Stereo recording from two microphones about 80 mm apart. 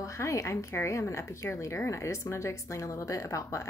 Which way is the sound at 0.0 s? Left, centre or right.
Left.